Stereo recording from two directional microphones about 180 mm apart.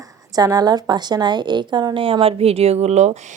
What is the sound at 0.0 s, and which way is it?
A woman's voice, 20° right (ahead or behind).